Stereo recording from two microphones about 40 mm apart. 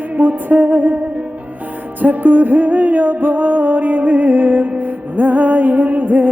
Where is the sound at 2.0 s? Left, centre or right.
Right.